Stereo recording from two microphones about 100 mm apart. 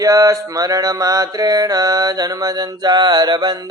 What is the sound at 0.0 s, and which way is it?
Mantra, 35° right (ahead or behind).